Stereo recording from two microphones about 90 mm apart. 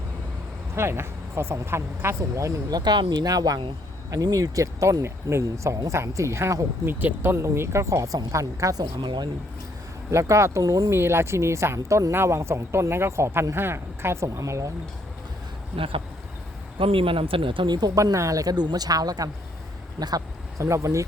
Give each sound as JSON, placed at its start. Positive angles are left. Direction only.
{"t": 0.8, "sound": "speech", "side_deg": -30}
{"t": 8.8, "sound": "speech", "side_deg": -55}
{"t": 10.1, "sound": "speech", "side_deg": -35}
{"t": 15.7, "sound": "speech", "side_deg": -85}